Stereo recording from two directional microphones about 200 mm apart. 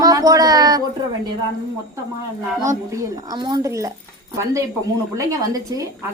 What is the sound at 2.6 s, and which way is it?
A woman's voice, 15° right (ahead or behind).